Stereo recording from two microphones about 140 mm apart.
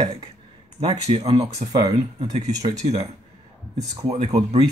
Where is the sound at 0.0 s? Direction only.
40° right (ahead or behind).